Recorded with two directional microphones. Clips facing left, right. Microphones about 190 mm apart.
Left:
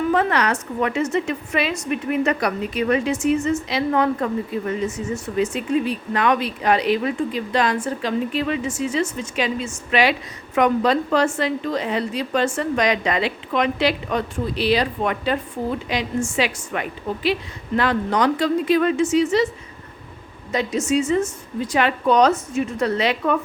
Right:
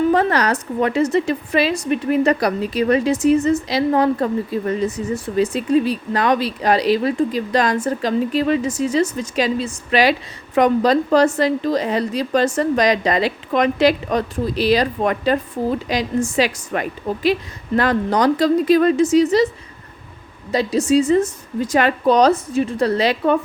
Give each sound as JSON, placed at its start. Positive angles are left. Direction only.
{"t": 0.1, "sound": "a woman's voice", "side_deg": -35}
{"t": 20.5, "sound": "a woman's voice", "side_deg": -35}